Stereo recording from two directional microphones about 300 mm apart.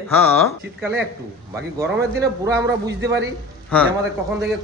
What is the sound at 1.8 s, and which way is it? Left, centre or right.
A man's voice, right.